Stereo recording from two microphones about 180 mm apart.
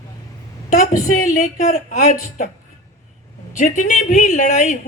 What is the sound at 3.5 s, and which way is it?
A woman's voice, 45° left (ahead or behind).